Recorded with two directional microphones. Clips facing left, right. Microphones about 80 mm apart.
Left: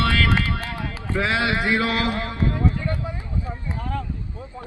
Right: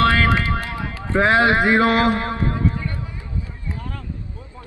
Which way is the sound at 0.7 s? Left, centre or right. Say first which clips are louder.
Right 4 dB; right.